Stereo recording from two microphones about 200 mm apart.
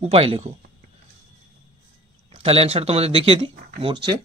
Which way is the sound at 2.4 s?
30° right (ahead or behind).